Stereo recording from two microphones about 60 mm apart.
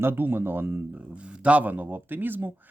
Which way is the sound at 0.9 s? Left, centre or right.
Centre.